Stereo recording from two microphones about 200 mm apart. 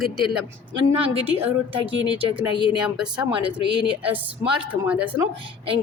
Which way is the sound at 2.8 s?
5° right (ahead or behind).